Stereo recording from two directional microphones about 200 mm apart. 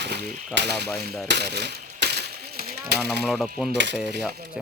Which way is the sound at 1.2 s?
55° right (ahead or behind).